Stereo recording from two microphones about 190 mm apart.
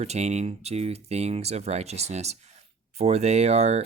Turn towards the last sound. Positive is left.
turn(degrees=-35)  # may be behind; listen again after turning